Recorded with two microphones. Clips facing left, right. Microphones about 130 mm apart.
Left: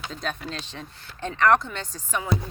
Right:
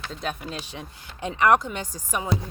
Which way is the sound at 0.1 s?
5° right (ahead or behind).